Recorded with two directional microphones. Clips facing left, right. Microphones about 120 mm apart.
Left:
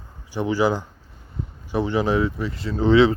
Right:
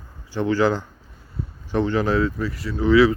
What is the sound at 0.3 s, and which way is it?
Speech, 15° left (ahead or behind).